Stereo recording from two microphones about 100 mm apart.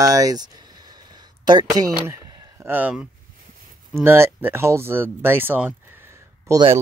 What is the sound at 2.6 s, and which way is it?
Speech, 20° right (ahead or behind).